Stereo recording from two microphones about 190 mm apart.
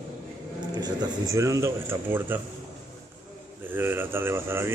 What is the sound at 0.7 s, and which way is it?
Speech, 20° right (ahead or behind).